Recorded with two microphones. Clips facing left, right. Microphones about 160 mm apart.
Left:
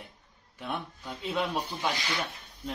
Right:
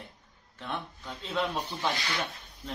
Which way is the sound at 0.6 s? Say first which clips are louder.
Left 1 dB; 10° left (ahead or behind).